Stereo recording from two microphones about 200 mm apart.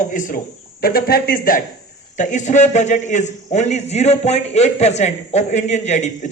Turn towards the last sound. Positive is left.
turn(degrees=35)  # may be behind; listen again after turning